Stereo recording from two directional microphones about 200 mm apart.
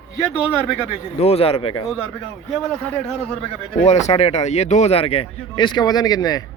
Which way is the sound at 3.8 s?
35° left (ahead or behind).